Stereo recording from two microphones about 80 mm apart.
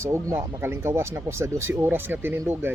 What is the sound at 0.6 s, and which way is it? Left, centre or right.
Speech, right.